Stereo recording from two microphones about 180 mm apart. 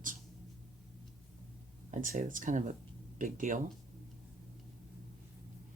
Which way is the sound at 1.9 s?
50° right (ahead or behind).